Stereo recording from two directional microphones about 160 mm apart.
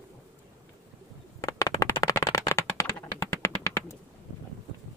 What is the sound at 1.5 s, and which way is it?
Clapping, 20° left (ahead or behind).